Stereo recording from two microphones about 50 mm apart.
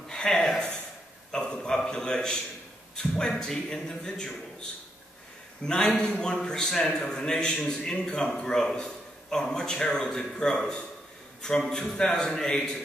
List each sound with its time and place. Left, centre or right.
0.1 s a sound: centre
3.0 s a man's voice: centre
5.6 s a man's voice: centre